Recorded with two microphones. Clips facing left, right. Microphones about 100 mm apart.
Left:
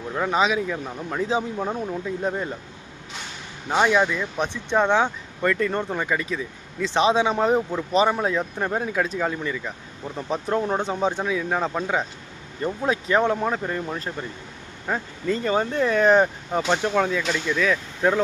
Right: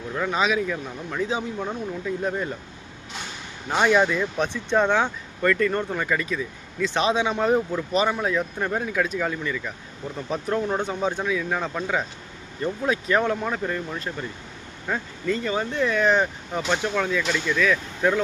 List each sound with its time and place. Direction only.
0.1 s speech: 20° left (ahead or behind)
2.0 s speech: 20° left (ahead or behind)
3.8 s speech: 5° left (ahead or behind)
4.0 s speech: 5° right (ahead or behind)
4.4 s speech: 15° left (ahead or behind)
15.3 s speech: 35° left (ahead or behind)